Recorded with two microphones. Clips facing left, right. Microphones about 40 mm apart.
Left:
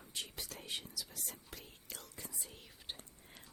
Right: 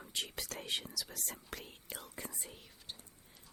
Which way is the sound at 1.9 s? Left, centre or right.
Centre.